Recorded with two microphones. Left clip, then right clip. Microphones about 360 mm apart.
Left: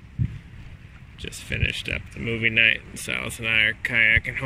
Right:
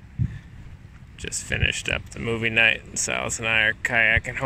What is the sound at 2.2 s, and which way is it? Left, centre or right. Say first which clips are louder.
Speech: left 3 dB; right.